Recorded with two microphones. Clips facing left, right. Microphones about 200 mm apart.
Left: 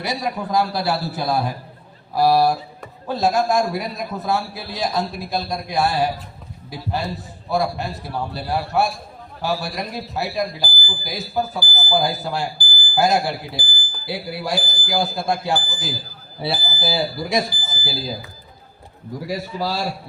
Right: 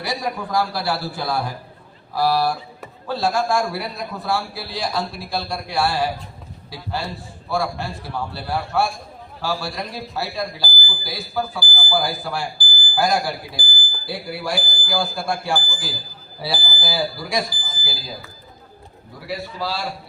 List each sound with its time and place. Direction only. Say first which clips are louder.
0.0 s speech: left 1 dB; 20° left (ahead or behind)
19.2 s a man's voice: left 2 dB; 40° left (ahead or behind)